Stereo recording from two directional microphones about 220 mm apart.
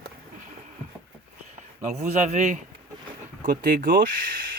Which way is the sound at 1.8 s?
30° right (ahead or behind).